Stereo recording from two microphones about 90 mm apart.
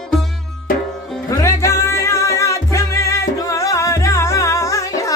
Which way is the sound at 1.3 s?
35° left (ahead or behind).